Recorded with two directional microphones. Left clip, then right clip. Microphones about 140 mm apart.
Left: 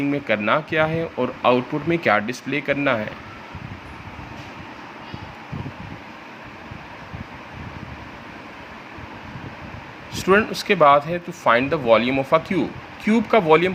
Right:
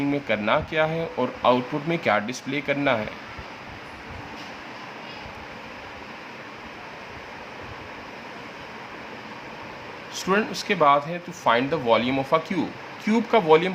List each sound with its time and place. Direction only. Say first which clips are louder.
0.1 s speech: left 3 dB; 20° left (ahead or behind)
10.2 s speech: left 6 dB; 30° left (ahead or behind)